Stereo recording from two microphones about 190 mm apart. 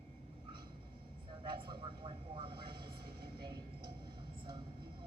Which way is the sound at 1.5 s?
25° right (ahead or behind).